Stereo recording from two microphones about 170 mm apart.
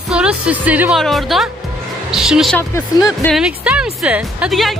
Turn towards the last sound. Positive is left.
turn(degrees=0)  # may be behind; listen again after turning